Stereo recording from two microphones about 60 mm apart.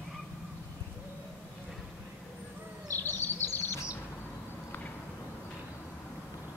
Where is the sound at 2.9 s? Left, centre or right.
Left.